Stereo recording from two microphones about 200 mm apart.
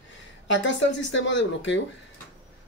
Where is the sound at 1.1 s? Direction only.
65° left (ahead or behind).